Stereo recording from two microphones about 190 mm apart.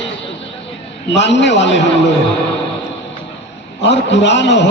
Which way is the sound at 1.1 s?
70° left (ahead or behind).